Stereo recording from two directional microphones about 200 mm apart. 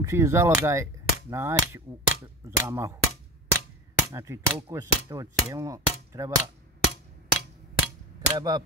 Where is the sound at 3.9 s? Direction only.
15° right (ahead or behind).